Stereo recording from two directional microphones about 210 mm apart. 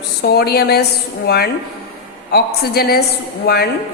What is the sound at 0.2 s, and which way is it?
A woman's voice, 50° left (ahead or behind).